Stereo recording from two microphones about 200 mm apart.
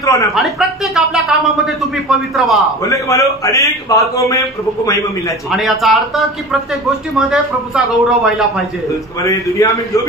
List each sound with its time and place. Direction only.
0.0 s speech: 15° left (ahead or behind)
0.3 s a woman's voice: centre (ahead or behind)
2.8 s a man's voice: 15° left (ahead or behind)
5.5 s speech: centre (ahead or behind)
9.6 s a man's voice: 15° left (ahead or behind)